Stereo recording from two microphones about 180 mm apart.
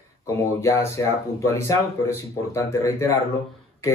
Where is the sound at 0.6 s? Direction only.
15° left (ahead or behind).